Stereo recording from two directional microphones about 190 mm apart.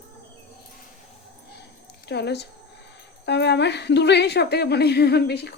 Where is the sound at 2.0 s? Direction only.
60° left (ahead or behind).